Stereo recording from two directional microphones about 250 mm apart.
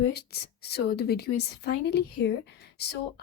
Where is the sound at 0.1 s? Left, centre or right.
Left.